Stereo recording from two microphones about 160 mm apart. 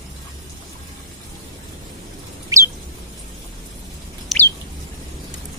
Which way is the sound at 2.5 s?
20° right (ahead or behind).